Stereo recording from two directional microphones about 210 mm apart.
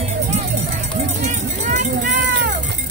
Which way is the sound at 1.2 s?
35° right (ahead or behind).